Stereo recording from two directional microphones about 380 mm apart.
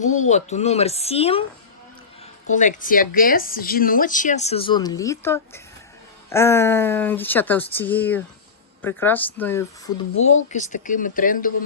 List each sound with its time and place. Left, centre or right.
0.0 s speech: centre
2.5 s speech: centre
10.2 s speech: left
10.5 s speech: centre